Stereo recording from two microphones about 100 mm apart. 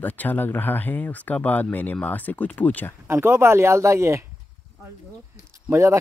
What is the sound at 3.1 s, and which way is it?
Speech, 25° right (ahead or behind).